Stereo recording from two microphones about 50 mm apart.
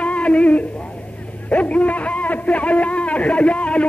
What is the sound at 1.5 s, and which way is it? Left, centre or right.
A man's voice, left.